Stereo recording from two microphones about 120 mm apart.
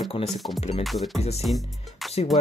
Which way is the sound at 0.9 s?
Centre (ahead or behind).